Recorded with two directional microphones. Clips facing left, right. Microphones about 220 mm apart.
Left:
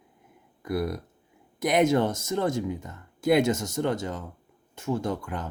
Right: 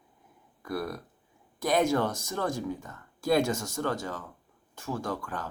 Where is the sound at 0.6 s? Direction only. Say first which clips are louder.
Left 5 dB; 20° left (ahead or behind).